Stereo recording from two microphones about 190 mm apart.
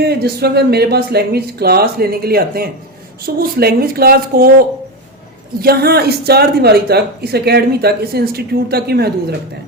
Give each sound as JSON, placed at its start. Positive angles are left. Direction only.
{"t": 0.1, "sound": "speech", "side_deg": -55}
{"t": 5.6, "sound": "speech", "side_deg": -55}